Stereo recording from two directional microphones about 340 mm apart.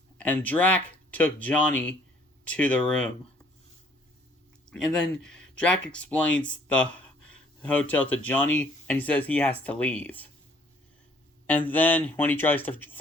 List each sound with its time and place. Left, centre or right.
0.2 s speech: centre
4.7 s speech: centre
6.9 s a sound: left
7.6 s speech: centre
11.4 s speech: centre